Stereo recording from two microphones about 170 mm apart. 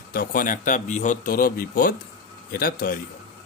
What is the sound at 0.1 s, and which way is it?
Speech, 55° left (ahead or behind).